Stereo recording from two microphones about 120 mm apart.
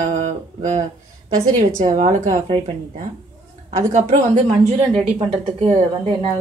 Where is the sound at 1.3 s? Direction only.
90° right.